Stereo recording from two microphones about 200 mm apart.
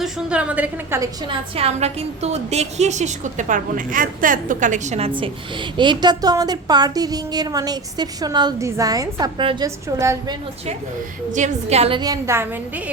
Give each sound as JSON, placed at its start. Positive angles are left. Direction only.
{"t": 0.0, "sound": "a woman's voice", "side_deg": -5}
{"t": 1.3, "sound": "a woman's voice", "side_deg": -30}
{"t": 5.7, "sound": "a woman's voice", "side_deg": -25}
{"t": 11.3, "sound": "a woman's voice", "side_deg": -35}